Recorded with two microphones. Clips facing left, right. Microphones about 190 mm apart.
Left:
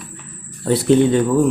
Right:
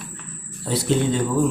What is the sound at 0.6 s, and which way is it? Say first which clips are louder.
Speech: left 7 dB; 60° left (ahead or behind).